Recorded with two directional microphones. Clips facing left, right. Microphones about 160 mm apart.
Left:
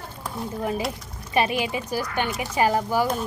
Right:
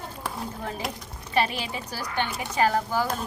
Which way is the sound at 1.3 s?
15° left (ahead or behind).